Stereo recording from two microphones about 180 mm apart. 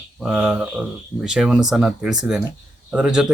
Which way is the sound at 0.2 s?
5° right (ahead or behind).